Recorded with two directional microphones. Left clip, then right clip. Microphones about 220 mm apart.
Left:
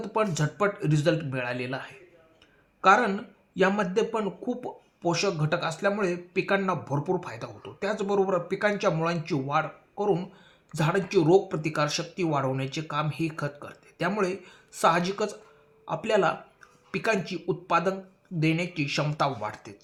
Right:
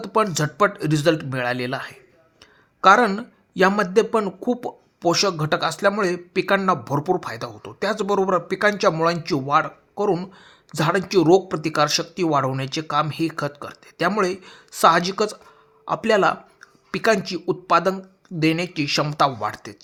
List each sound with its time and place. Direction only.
0.0 s speech: 45° right (ahead or behind)